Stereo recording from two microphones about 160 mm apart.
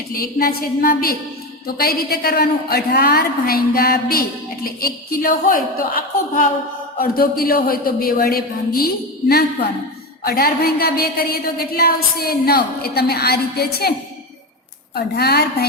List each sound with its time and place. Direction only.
0.1 s a woman's voice: 65° left (ahead or behind)
10.2 s a woman's voice: 70° left (ahead or behind)
14.9 s speech: 80° left